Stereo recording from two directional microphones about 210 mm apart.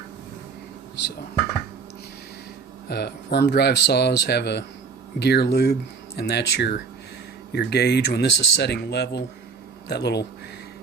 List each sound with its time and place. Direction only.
2.9 s speech: 50° left (ahead or behind)